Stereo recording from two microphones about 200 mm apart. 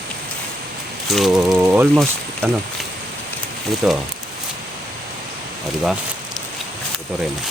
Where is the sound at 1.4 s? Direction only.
5° right (ahead or behind).